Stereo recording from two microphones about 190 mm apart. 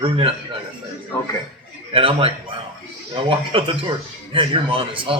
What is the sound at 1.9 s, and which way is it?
A man's voice, 30° right (ahead or behind).